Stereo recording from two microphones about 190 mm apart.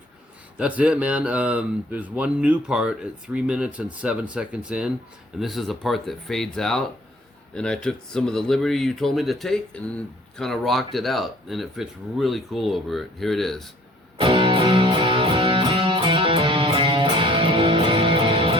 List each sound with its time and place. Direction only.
0.5 s speech: 5° right (ahead or behind)
14.2 s music: 25° right (ahead or behind)